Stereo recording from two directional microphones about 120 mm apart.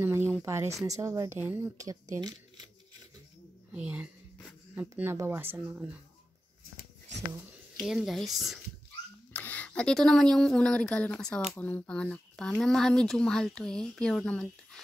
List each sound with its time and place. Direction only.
0.0 s speech: 20° right (ahead or behind)
1.4 s speech: 15° right (ahead or behind)
1.8 s speech: 30° right (ahead or behind)
3.7 s speech: 15° right (ahead or behind)
5.1 s speech: 20° right (ahead or behind)
7.8 s speech: 5° right (ahead or behind)
9.3 s speech: 15° left (ahead or behind)